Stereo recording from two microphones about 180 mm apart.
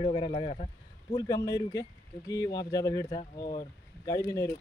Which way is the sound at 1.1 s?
20° left (ahead or behind).